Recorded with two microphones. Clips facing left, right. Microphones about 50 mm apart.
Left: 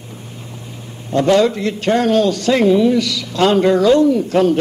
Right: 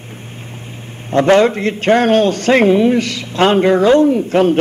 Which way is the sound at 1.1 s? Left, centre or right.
Right.